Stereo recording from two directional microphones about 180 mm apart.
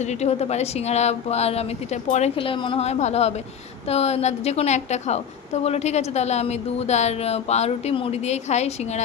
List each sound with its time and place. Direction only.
0.0 s speech: 40° left (ahead or behind)